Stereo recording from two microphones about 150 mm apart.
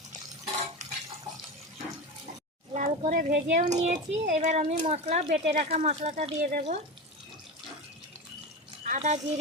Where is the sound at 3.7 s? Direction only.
45° right (ahead or behind).